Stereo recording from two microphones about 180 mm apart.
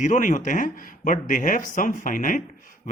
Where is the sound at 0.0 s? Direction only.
45° left (ahead or behind).